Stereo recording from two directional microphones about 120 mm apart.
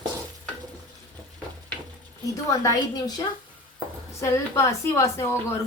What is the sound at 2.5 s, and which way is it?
Speech, 30° left (ahead or behind).